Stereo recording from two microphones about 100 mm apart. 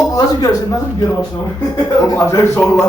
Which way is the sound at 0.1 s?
35° left (ahead or behind).